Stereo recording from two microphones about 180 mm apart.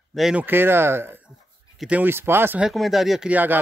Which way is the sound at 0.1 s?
5° right (ahead or behind).